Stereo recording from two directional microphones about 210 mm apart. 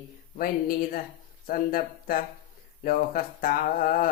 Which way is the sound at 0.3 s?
45° left (ahead or behind).